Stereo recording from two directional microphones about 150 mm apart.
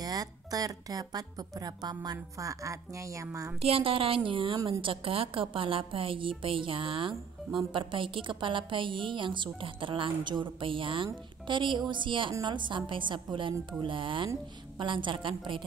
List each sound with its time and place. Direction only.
0.0 s a woman's voice: 25° right (ahead or behind)
3.6 s a woman's voice: 35° right (ahead or behind)